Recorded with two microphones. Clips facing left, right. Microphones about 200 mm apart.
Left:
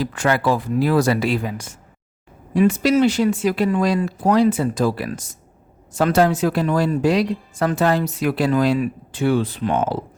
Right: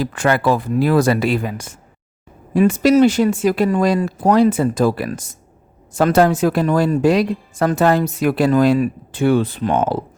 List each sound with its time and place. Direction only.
0.0 s speech: 55° right (ahead or behind)